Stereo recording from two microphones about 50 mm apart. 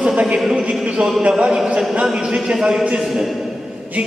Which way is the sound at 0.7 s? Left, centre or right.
Right.